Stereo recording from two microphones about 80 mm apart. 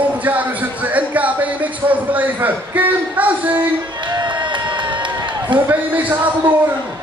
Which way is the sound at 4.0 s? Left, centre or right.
Right.